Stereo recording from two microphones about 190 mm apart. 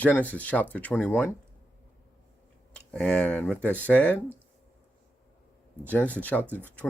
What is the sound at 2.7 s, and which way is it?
Speech, 5° left (ahead or behind).